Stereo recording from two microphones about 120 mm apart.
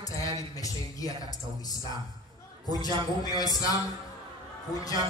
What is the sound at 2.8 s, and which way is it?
Speech, 35° left (ahead or behind).